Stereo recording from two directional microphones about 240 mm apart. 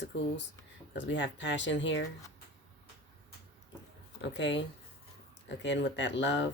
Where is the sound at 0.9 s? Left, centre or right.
Left.